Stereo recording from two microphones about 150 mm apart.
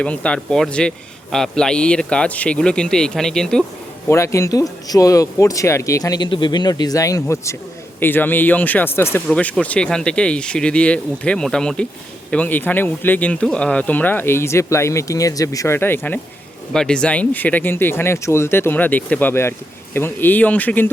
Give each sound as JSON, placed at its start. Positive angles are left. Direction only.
{"t": 0.0, "sound": "speech", "side_deg": 10}
{"t": 4.1, "sound": "speech", "side_deg": 20}